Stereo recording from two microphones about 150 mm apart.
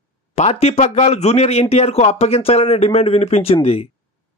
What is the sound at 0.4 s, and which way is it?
Speech, 45° left (ahead or behind).